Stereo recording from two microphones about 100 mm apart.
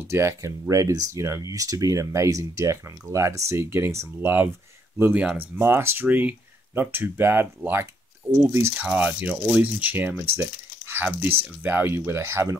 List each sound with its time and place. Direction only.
0.1 s speech: 30° right (ahead or behind)
5.2 s speech: 10° right (ahead or behind)
5.6 s speech: 25° right (ahead or behind)
8.7 s speech: 15° right (ahead or behind)